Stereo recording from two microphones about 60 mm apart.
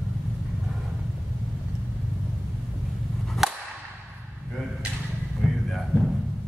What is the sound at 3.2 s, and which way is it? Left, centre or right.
Whip, centre.